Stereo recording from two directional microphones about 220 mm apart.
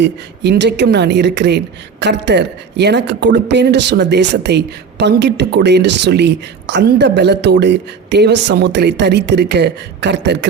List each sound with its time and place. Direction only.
0.0 s speech: 50° right (ahead or behind)